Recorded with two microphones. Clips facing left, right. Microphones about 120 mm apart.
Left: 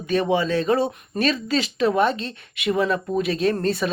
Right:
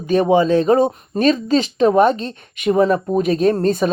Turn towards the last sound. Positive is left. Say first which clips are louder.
# right 6 dB
turn(degrees=-45)  # may be behind; listen again after turning